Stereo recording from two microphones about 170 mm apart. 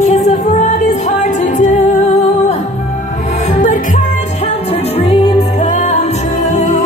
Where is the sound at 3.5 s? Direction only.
50° left (ahead or behind).